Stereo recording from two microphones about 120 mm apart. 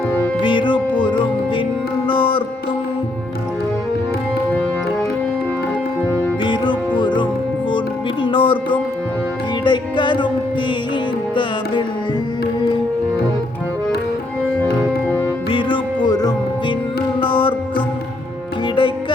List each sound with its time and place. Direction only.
0.4 s music: 45° left (ahead or behind)
6.4 s music: 40° left (ahead or behind)
14.8 s music: 15° left (ahead or behind)
15.4 s music: 45° left (ahead or behind)
17.2 s music: 45° left (ahead or behind)